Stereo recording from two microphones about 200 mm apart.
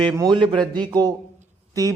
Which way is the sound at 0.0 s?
20° right (ahead or behind).